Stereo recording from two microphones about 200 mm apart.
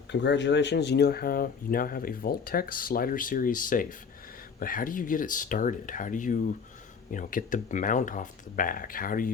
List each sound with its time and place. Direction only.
0.1 s speech: 60° left (ahead or behind); by 9.3 s 45° left (ahead or behind)